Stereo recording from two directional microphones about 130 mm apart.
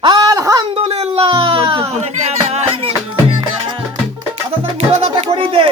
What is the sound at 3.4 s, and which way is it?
Music, 40° right (ahead or behind).